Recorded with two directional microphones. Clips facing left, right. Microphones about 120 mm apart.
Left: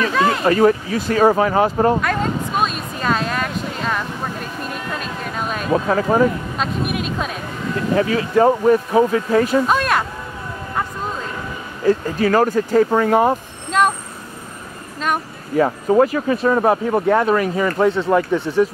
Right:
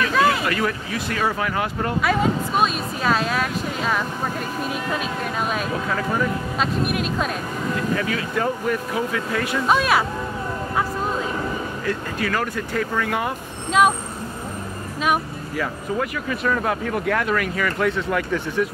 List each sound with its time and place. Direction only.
0.1 s speech: centre (ahead or behind)
0.5 s speech: 35° left (ahead or behind)
2.0 s a sound: 5° right (ahead or behind)
5.7 s speech: 40° left (ahead or behind)
6.6 s speech: centre (ahead or behind)
7.9 s speech: 35° left (ahead or behind)
9.7 s vehicle: 5° right (ahead or behind)
11.8 s speech: 30° left (ahead or behind)
13.7 s vehicle: 5° right (ahead or behind)
15.5 s speech: 35° left (ahead or behind)